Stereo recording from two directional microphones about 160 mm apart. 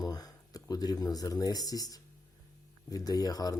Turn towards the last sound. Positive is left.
turn(degrees=25)  # may be behind; listen again after turning